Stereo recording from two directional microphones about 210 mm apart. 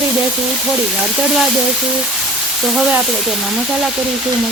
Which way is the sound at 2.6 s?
Centre (ahead or behind).